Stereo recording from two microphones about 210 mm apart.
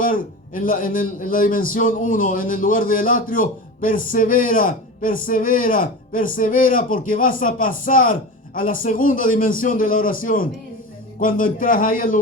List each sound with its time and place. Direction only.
0.0 s a man's voice: 40° left (ahead or behind)